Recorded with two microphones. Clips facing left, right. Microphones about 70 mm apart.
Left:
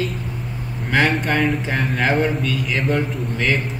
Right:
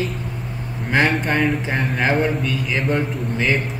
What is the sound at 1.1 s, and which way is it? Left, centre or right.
Speech, centre.